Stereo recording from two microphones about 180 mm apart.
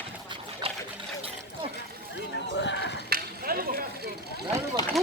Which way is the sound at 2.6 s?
75° left (ahead or behind).